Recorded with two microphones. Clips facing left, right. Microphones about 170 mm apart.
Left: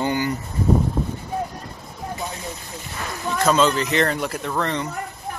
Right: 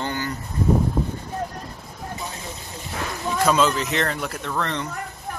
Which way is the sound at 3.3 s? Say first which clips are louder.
Left 1 dB; 10° right (ahead or behind).